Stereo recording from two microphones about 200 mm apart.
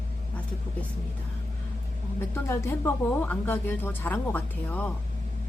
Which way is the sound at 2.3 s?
10° left (ahead or behind).